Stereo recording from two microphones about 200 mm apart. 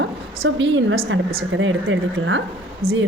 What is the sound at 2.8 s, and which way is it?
Speech, 90° right.